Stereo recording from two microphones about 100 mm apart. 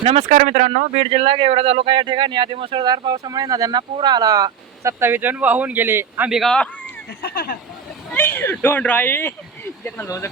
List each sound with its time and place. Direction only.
0.0 s speech: 80° right
2.0 s speech: 50° right (ahead or behind); by 6.3 s 20° right (ahead or behind)
6.3 s speech: 5° left (ahead or behind)
8.1 s speech: 20° left (ahead or behind)